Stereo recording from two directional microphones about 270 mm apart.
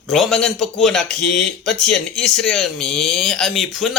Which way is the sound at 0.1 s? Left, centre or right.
Centre.